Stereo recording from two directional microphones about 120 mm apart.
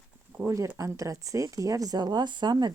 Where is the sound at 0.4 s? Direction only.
25° right (ahead or behind).